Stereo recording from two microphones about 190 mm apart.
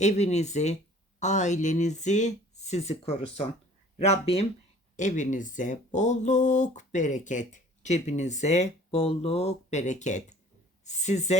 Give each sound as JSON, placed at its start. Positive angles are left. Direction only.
{"t": 0.0, "sound": "speech", "side_deg": 35}